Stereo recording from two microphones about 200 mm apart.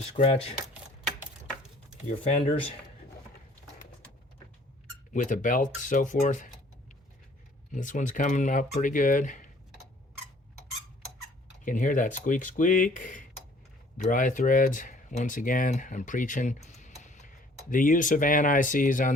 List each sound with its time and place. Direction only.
0.2 s speech: 30° left (ahead or behind)
5.1 s speech: 40° left (ahead or behind)
7.7 s speech: 40° left (ahead or behind)
11.6 s speech: 40° left (ahead or behind)